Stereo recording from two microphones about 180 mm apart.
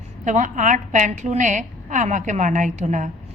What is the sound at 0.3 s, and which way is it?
A woman's voice, 45° right (ahead or behind).